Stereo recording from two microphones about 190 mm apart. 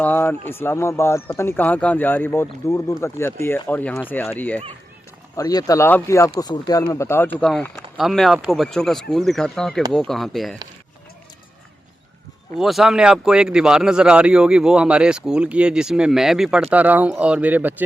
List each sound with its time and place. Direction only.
0.0 s speech: 10° left (ahead or behind)
5.4 s speech: 20° left (ahead or behind)
7.3 s speech: 5° left (ahead or behind)
12.5 s speech: centre (ahead or behind)